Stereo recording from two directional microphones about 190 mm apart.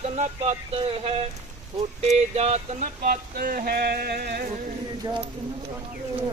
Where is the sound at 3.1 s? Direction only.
50° right (ahead or behind).